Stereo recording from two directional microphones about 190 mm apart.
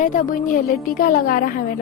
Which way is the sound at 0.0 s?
45° left (ahead or behind).